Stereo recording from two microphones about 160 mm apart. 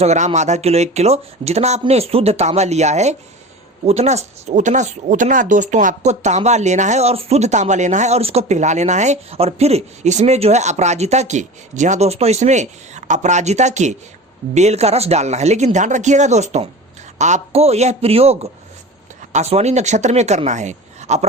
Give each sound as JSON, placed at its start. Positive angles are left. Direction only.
{"t": 0.0, "sound": "a man's voice", "side_deg": -40}